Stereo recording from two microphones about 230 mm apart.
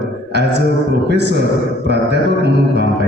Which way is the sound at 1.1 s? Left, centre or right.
Right.